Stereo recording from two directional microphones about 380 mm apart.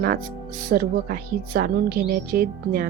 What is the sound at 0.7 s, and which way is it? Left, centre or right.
Speech, right.